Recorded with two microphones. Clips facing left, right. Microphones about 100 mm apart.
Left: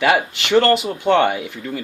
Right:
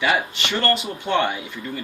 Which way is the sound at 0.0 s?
70° left (ahead or behind).